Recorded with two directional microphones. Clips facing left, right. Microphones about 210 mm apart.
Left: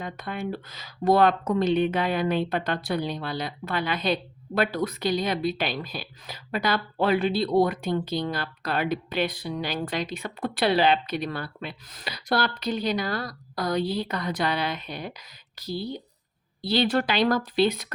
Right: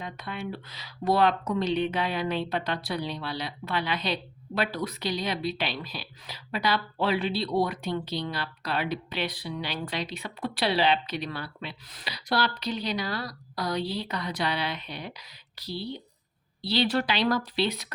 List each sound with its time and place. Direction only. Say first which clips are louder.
0.0 s speech: left 4 dB; 50° left (ahead or behind)